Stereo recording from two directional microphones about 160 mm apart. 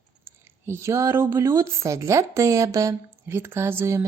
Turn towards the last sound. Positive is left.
turn(degrees=-15)  # may be behind; listen again after turning